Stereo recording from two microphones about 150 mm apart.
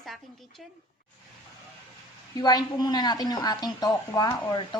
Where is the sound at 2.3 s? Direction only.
25° left (ahead or behind).